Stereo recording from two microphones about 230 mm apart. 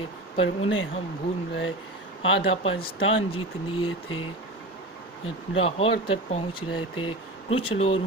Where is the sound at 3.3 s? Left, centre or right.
Left.